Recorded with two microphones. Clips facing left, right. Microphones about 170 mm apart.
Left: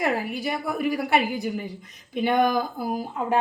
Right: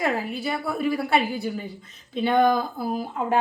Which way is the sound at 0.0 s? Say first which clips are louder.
Even; 15° left (ahead or behind).